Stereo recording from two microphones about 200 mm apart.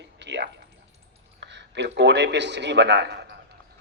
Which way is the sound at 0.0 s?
60° right (ahead or behind).